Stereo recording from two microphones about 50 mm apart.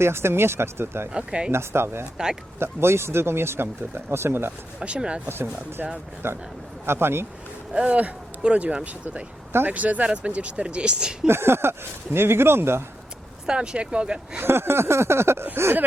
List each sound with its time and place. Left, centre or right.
0.0 s speech: right
1.1 s speech: centre
1.5 s speech: right
4.8 s speech: centre
5.3 s speech: right
7.7 s speech: right
11.3 s speech: right
13.5 s speech: centre
14.3 s speech: right